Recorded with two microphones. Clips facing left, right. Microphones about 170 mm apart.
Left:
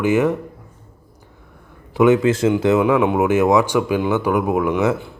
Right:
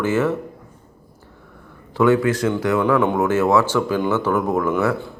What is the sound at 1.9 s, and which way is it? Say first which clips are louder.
Speech: left 2 dB; 20° left (ahead or behind).